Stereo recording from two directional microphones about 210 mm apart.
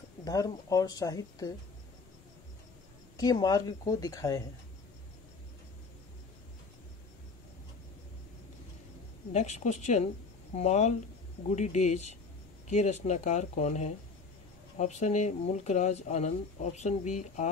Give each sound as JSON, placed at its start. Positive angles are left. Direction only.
{"t": 0.2, "sound": "speech", "side_deg": 15}
{"t": 3.2, "sound": "speech", "side_deg": 20}
{"t": 9.3, "sound": "speech", "side_deg": 35}